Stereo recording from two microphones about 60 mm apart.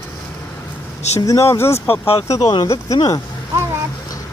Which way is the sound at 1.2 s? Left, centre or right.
Left.